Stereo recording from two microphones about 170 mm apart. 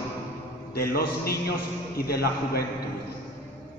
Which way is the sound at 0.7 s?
65° left (ahead or behind).